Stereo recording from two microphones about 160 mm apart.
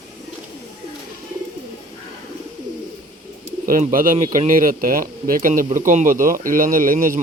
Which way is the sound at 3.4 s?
60° right (ahead or behind).